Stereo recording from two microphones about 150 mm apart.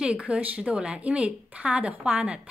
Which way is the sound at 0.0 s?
5° right (ahead or behind).